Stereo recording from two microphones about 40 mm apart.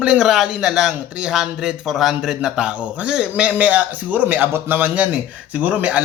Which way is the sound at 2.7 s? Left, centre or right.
Right.